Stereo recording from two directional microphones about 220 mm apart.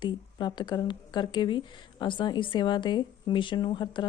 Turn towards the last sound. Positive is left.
turn(degrees=20)  # may be behind; listen again after turning